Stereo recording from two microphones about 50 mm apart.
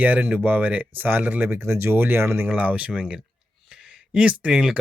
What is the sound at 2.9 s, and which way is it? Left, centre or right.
Speech, centre.